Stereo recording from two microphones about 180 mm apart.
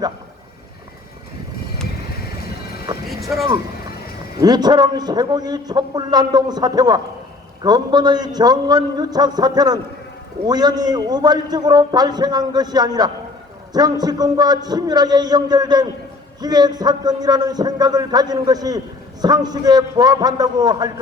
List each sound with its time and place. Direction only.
3.1 s vehicle: centre (ahead or behind)
4.4 s a man's voice: 20° right (ahead or behind)